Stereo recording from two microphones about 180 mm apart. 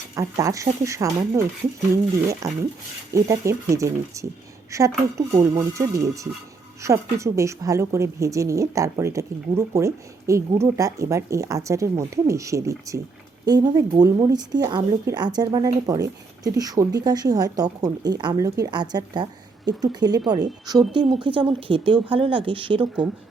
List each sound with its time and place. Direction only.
0.2 s a woman's voice: 15° right (ahead or behind)
3.1 s a woman's voice: 15° right (ahead or behind)